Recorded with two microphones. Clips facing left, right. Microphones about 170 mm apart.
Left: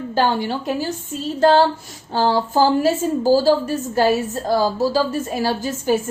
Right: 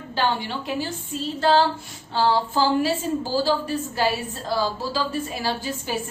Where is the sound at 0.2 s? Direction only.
40° left (ahead or behind).